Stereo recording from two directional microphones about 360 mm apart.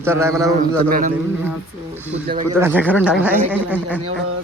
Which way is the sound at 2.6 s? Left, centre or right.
Centre.